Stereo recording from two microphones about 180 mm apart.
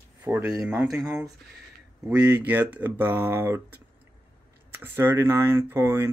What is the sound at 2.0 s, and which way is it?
Speech, 5° right (ahead or behind).